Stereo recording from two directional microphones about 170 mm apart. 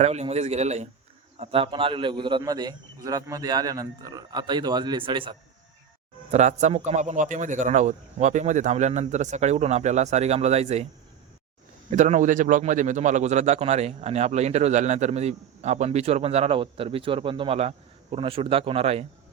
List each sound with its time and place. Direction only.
0.0 s a man's voice: 40° right (ahead or behind)
6.3 s a man's voice: 45° right (ahead or behind)
11.9 s a man's voice: 45° right (ahead or behind)